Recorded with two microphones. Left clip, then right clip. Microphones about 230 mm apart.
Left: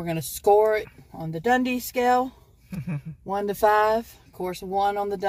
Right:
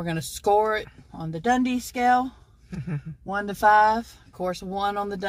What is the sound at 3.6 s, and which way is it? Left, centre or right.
Speech, centre.